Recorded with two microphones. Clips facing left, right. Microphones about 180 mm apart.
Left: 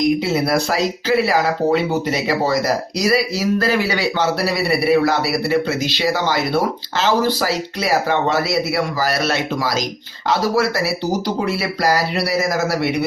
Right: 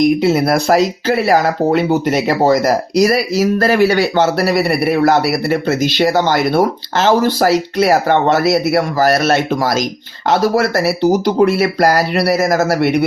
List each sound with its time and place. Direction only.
0.2 s speech: 55° right (ahead or behind)